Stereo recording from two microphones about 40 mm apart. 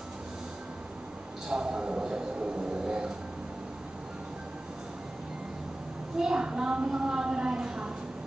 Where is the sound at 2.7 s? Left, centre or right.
Centre.